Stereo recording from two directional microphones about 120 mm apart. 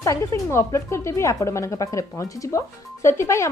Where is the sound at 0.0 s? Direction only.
30° left (ahead or behind).